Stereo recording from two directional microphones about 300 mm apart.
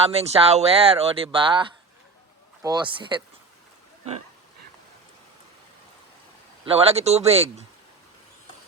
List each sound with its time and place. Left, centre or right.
0.0 s speech: centre
6.7 s speech: centre